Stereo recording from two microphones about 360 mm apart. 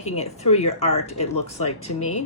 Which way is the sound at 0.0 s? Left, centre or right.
Centre.